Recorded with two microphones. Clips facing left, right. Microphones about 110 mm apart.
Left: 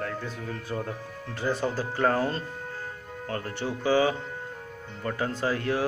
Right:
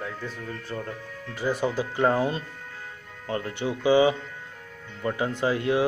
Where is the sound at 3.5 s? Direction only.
15° right (ahead or behind).